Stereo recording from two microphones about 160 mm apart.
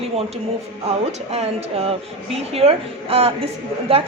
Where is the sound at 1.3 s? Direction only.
40° right (ahead or behind).